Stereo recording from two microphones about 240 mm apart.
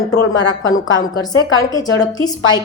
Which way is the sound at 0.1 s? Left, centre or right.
Left.